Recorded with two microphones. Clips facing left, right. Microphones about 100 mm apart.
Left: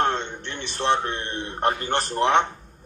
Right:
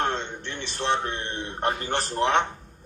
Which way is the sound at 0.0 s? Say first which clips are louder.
Left 4 dB; 35° left (ahead or behind).